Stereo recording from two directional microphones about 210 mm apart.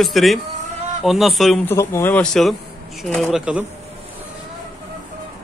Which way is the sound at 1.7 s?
10° left (ahead or behind).